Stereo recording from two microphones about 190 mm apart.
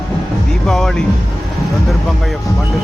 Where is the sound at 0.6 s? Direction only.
5° left (ahead or behind).